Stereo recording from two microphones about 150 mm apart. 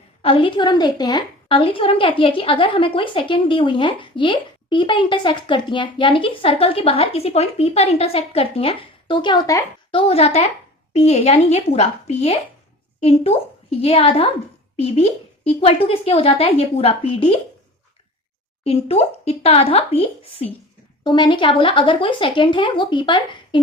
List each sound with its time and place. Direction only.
0.2 s a woman's voice: 35° left (ahead or behind)
9.9 s a woman's voice: 40° left (ahead or behind)
18.6 s a woman's voice: 40° left (ahead or behind)